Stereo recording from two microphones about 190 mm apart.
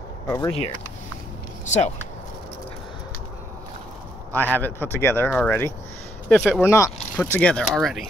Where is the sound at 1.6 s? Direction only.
35° left (ahead or behind).